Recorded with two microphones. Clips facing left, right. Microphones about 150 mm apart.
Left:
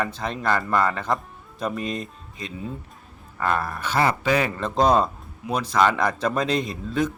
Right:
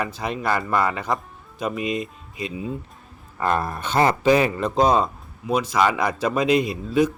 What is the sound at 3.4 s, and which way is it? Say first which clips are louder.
A man's voice: right 2 dB; 20° right (ahead or behind).